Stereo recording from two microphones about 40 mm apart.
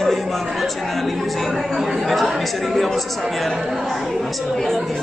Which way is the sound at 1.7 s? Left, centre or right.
Centre.